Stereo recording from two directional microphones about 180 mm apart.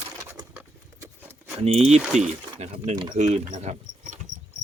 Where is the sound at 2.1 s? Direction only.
40° right (ahead or behind).